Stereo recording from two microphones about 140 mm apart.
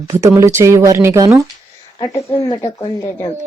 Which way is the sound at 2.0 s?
25° left (ahead or behind).